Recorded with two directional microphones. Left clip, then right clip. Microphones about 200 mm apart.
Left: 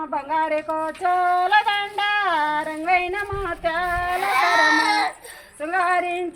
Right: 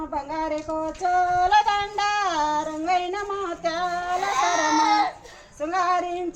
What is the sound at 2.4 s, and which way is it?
Female singing, 25° left (ahead or behind).